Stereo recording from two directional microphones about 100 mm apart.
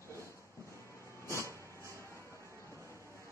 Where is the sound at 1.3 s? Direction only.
30° left (ahead or behind).